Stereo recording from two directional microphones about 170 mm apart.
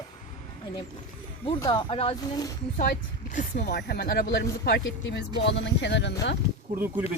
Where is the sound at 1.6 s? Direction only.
30° left (ahead or behind).